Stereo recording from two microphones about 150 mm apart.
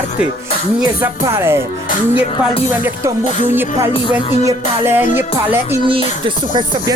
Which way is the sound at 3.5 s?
15° right (ahead or behind).